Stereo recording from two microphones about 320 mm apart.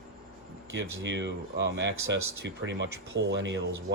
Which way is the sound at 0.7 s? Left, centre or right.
Right.